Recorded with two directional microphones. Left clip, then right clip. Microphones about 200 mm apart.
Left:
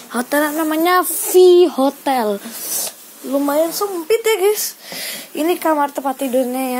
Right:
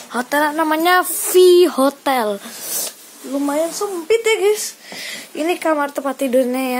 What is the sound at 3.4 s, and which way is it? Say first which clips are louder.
Speech: left 2 dB; 15° left (ahead or behind).